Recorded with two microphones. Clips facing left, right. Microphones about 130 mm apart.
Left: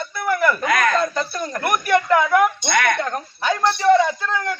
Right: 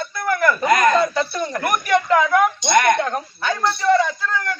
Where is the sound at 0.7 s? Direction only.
20° right (ahead or behind).